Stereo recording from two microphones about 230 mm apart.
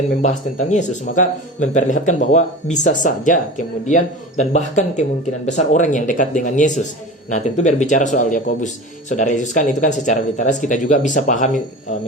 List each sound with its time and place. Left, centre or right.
0.2 s speech: left